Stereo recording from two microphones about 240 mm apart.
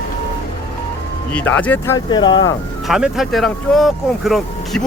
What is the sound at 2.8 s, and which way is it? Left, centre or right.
Speech, centre.